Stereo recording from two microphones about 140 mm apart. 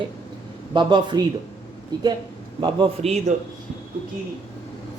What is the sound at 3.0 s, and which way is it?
Speech, 55° right (ahead or behind).